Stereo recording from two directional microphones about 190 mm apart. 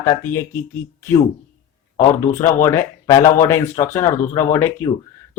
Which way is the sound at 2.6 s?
15° left (ahead or behind).